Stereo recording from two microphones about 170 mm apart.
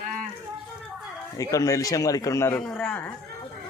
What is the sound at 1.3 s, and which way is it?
A man's voice, 20° left (ahead or behind).